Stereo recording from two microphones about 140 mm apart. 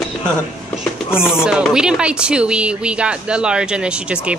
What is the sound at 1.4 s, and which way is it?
Speech, 5° right (ahead or behind).